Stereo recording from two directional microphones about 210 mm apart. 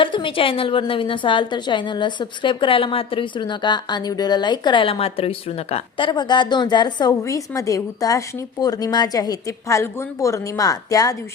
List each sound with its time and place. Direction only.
0.0 s a woman's voice: 25° left (ahead or behind)